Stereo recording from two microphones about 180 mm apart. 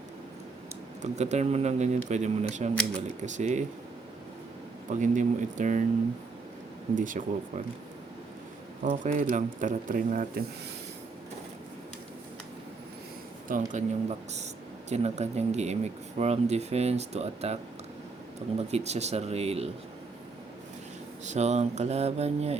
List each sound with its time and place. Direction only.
1.1 s speech: 40° right (ahead or behind)
4.9 s speech: 45° right (ahead or behind)
6.9 s speech: 45° right (ahead or behind)
8.8 s speech: 40° right (ahead or behind)
13.7 s speech: 40° right (ahead or behind)
21.2 s speech: 40° right (ahead or behind)